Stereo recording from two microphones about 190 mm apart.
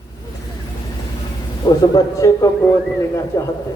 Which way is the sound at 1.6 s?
20° left (ahead or behind).